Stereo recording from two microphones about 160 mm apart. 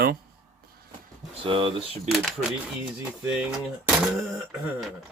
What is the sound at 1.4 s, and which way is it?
Speech, 35° right (ahead or behind).